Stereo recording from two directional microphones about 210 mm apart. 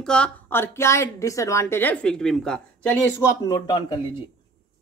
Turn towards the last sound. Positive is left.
turn(degrees=20)  # may be behind; listen again after turning